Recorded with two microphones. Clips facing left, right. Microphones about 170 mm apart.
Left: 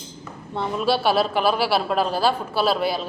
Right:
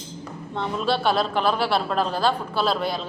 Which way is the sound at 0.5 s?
10° left (ahead or behind).